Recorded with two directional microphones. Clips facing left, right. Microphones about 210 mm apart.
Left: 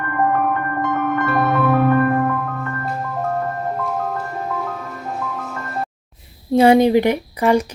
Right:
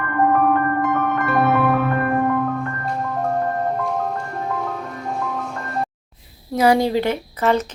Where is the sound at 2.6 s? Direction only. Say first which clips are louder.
Even; centre (ahead or behind).